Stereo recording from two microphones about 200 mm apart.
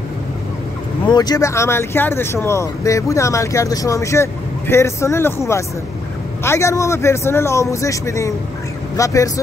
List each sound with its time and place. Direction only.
1.0 s speech: 20° left (ahead or behind)